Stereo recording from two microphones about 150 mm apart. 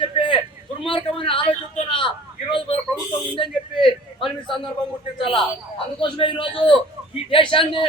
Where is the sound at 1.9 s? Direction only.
35° left (ahead or behind).